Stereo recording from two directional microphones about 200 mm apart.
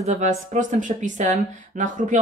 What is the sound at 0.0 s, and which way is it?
Speech, 35° right (ahead or behind).